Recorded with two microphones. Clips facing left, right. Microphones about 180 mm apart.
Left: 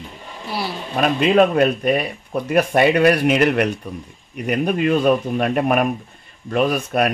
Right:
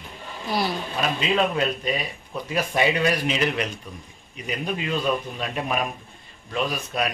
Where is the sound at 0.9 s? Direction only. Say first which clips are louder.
Left 10 dB; 55° left (ahead or behind).